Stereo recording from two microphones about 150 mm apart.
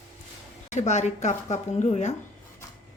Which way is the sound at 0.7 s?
50° left (ahead or behind).